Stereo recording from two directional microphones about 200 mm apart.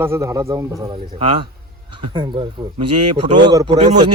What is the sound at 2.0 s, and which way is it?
A man's voice, 25° right (ahead or behind).